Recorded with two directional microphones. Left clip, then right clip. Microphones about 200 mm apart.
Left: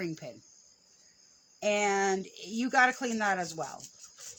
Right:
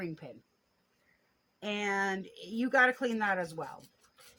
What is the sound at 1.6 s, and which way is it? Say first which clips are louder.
Speech: left 5 dB; 20° left (ahead or behind).